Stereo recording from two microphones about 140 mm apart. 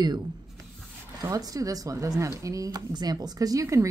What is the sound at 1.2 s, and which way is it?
Speech, 25° right (ahead or behind).